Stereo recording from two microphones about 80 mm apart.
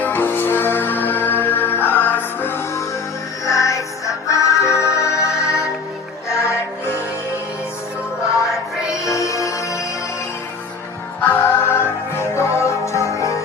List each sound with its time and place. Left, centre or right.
0.0 s music: left
3.4 s music: left
8.9 s music: left
11.2 s music: left